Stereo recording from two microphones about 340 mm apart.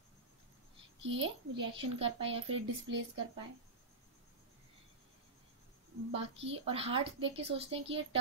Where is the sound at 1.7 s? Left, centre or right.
Centre.